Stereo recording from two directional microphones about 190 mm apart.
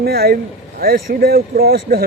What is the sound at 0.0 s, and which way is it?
Speech, 55° right (ahead or behind).